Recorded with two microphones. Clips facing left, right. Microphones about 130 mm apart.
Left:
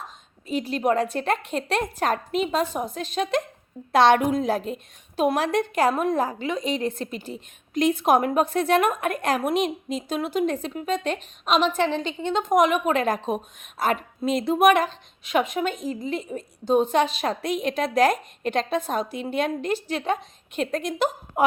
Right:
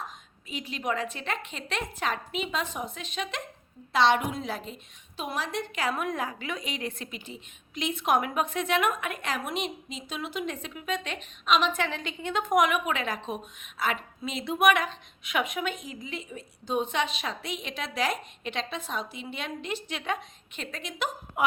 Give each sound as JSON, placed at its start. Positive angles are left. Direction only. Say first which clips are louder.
{"t": 0.4, "sound": "a woman's voice", "louder": "left 9 dB", "side_deg": 40}